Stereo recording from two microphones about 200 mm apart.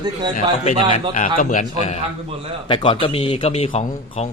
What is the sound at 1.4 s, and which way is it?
Speech, 40° left (ahead or behind).